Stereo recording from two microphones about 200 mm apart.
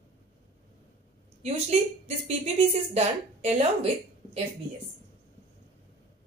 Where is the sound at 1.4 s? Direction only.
30° right (ahead or behind).